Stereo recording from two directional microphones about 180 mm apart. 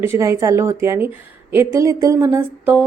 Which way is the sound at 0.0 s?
15° right (ahead or behind).